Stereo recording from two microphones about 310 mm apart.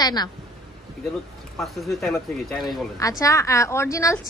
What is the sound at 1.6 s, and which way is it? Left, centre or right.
A woman's voice, centre.